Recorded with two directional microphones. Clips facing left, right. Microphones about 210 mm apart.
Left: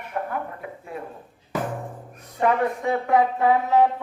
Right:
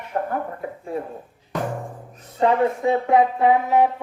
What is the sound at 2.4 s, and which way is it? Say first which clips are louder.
A man's voice: right 3 dB; 25° right (ahead or behind).